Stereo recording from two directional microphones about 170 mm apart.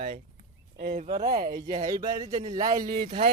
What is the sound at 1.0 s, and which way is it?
Speech, 45° right (ahead or behind).